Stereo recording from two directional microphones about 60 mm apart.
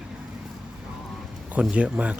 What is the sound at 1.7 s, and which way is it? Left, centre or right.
Speech, right.